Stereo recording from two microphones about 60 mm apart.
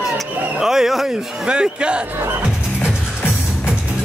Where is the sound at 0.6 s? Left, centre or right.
Centre.